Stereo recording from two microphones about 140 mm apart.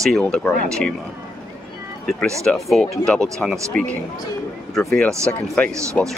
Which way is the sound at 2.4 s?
Centre (ahead or behind).